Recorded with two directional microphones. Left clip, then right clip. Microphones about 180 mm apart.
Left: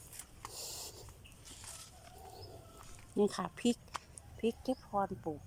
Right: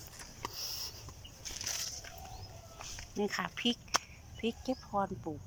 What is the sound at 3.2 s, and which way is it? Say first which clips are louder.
Speech: left 1 dB; 20° left (ahead or behind).